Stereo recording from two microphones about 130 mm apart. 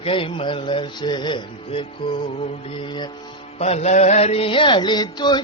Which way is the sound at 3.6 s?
55° left (ahead or behind).